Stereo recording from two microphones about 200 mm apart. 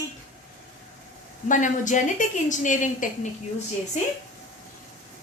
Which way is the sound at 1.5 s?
40° left (ahead or behind).